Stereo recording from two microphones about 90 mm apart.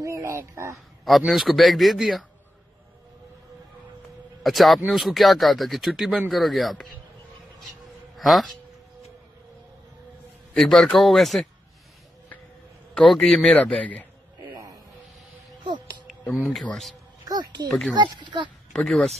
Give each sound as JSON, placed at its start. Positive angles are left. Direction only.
{"t": 0.0, "sound": "a sound", "side_deg": -30}
{"t": 1.0, "sound": "speech", "side_deg": 0}
{"t": 4.4, "sound": "speech", "side_deg": 0}
{"t": 8.2, "sound": "speech", "side_deg": 0}
{"t": 10.5, "sound": "speech", "side_deg": 5}
{"t": 12.9, "sound": "a man's voice", "side_deg": 10}
{"t": 14.4, "sound": "a sound", "side_deg": -45}
{"t": 16.3, "sound": "speech", "side_deg": 0}
{"t": 17.3, "sound": "speech", "side_deg": -50}
{"t": 17.6, "sound": "speech", "side_deg": 5}
{"t": 17.9, "sound": "speech", "side_deg": -55}
{"t": 18.9, "sound": "speech", "side_deg": 5}